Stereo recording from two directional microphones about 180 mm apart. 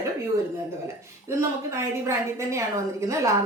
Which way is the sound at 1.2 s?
15° right (ahead or behind).